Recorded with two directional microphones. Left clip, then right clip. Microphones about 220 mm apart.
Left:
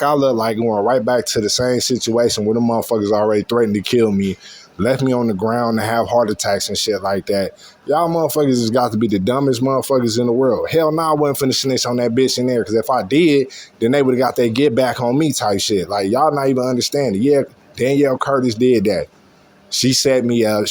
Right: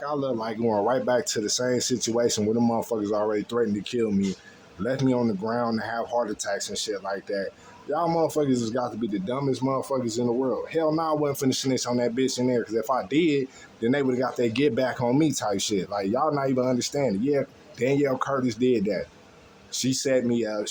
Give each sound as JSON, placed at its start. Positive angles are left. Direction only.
{"t": 0.0, "sound": "speech", "side_deg": 35}
{"t": 0.6, "sound": "speech", "side_deg": 20}
{"t": 8.0, "sound": "speech", "side_deg": 25}